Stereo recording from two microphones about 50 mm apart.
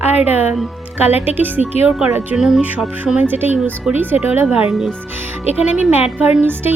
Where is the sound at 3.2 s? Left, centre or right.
Right.